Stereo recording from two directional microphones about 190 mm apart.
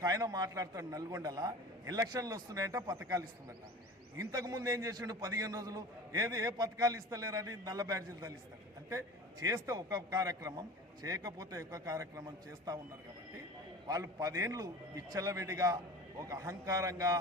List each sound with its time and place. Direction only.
0.0 s a man's voice: 20° right (ahead or behind)
13.8 s a man's voice: 20° right (ahead or behind)